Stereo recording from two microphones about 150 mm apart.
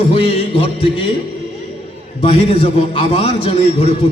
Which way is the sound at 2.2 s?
40° left (ahead or behind).